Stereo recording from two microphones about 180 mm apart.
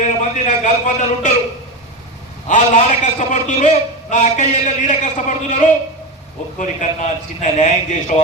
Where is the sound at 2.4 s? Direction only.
45° left (ahead or behind).